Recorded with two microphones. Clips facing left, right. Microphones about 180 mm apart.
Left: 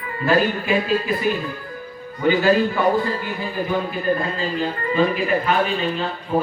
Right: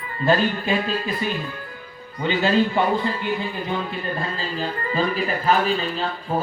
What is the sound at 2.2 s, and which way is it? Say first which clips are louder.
Speech: left 3 dB; 25° right (ahead or behind).